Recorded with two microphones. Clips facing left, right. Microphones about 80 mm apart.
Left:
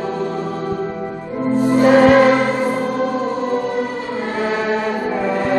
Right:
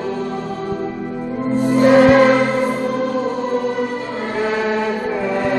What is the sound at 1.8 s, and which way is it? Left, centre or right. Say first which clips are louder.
Music: even; centre.